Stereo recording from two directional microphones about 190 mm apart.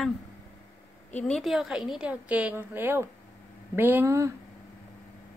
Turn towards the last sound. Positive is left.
turn(degrees=-15)  # may be behind; listen again after turning